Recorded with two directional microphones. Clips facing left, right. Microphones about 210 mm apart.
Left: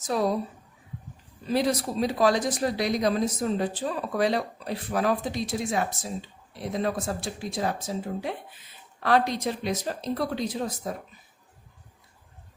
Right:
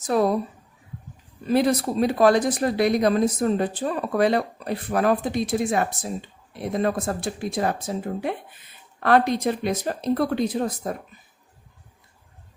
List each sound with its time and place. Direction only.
0.0 s a woman's voice: 55° right (ahead or behind)
1.5 s speech: 55° right (ahead or behind)